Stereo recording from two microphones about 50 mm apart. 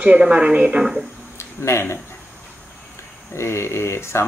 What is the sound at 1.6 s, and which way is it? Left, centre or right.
Speech, left.